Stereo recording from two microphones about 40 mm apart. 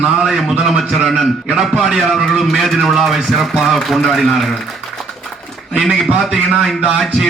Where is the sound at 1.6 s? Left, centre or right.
Centre.